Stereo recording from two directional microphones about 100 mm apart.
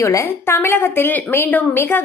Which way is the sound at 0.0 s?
30° left (ahead or behind).